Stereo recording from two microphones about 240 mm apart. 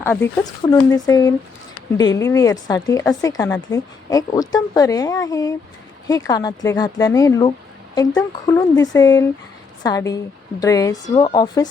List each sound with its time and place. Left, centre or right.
0.0 s speech: centre